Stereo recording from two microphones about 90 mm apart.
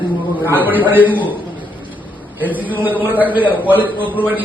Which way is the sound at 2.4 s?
20° right (ahead or behind).